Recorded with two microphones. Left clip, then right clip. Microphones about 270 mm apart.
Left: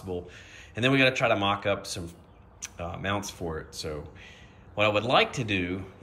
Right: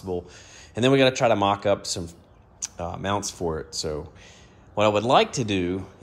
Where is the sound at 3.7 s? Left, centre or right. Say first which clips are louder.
Right 7 dB; right.